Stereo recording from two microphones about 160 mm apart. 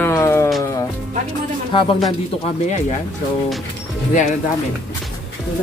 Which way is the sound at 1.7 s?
30° left (ahead or behind).